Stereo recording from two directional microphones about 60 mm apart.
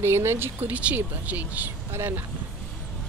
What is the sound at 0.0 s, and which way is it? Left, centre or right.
Speech, right.